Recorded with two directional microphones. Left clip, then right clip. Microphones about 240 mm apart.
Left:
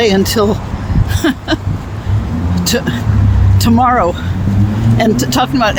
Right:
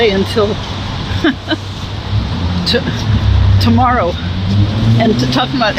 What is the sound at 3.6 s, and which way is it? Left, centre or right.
Speech, left.